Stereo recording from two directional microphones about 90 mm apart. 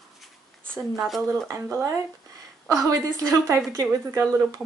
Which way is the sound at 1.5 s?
30° right (ahead or behind).